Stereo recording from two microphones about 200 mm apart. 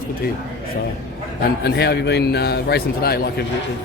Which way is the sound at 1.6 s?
55° left (ahead or behind).